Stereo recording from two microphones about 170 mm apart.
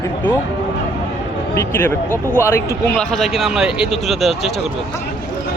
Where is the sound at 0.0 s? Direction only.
10° left (ahead or behind).